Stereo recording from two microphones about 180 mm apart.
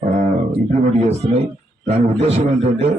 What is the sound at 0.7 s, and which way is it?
A man's voice, 35° right (ahead or behind).